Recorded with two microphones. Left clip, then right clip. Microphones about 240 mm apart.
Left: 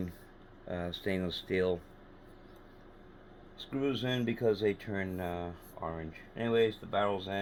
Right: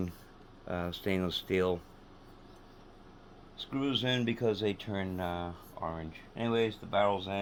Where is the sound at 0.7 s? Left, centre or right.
Right.